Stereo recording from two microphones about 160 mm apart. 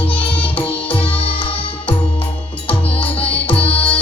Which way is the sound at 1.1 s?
35° left (ahead or behind).